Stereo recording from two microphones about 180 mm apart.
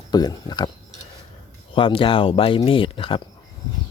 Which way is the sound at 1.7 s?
30° left (ahead or behind).